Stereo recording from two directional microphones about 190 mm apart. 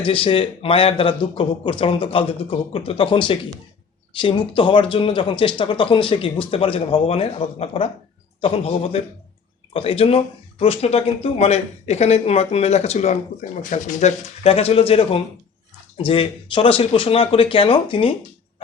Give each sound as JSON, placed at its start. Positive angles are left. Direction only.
{"t": 0.0, "sound": "speech", "side_deg": 30}